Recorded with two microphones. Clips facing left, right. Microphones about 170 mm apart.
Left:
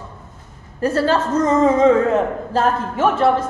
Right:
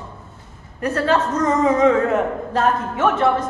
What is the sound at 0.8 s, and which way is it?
A woman's voice, 30° left (ahead or behind).